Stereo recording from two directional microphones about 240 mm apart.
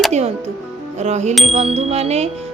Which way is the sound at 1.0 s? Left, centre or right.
Right.